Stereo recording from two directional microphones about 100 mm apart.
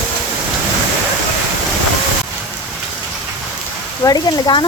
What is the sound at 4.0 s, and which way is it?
Speech, 40° left (ahead or behind).